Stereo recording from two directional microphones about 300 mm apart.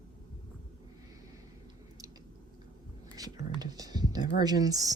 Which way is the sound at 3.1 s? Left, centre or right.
Centre.